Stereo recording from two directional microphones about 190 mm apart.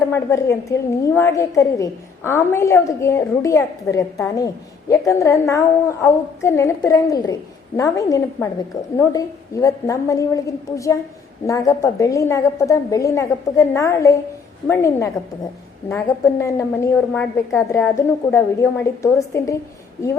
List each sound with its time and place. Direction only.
0.1 s a woman's voice: 15° left (ahead or behind)